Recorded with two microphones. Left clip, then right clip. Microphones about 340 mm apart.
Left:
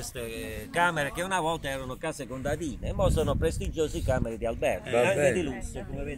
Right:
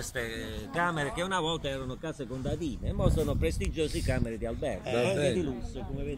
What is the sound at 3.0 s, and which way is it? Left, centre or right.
Speech, left.